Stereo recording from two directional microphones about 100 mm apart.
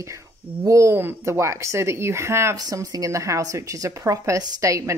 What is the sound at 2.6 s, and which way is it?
A woman's voice, 40° right (ahead or behind).